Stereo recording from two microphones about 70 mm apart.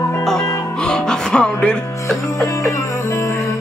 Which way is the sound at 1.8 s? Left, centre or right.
Left.